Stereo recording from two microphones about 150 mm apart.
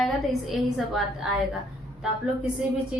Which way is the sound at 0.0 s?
Centre (ahead or behind).